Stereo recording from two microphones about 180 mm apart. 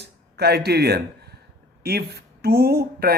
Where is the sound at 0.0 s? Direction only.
65° right (ahead or behind).